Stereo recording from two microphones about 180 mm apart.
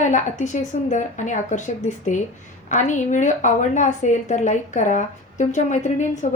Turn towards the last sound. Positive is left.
turn(degrees=40)  # may be behind; listen again after turning